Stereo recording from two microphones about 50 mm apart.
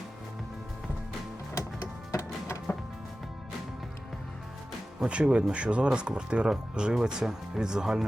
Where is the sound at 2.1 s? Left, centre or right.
Left.